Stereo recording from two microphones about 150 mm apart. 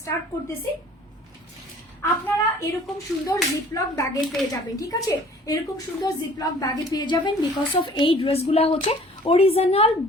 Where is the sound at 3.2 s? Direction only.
20° left (ahead or behind).